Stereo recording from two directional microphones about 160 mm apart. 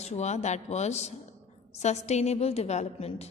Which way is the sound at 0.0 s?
45° left (ahead or behind).